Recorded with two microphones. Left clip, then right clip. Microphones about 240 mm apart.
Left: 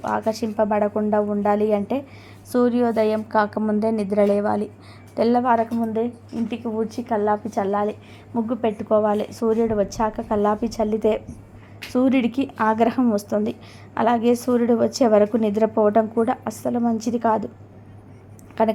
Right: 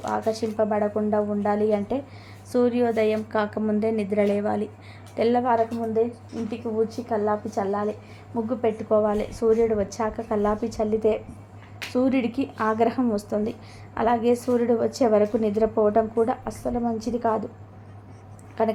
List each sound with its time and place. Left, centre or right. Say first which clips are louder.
0.0 s a woman's voice: left 2 dB; centre
18.6 s speech: left 4 dB; left